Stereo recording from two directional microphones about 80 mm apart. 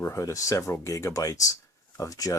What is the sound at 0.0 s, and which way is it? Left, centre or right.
Speech, left.